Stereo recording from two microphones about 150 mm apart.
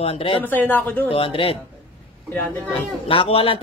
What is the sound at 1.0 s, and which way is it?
Speech, 35° left (ahead or behind).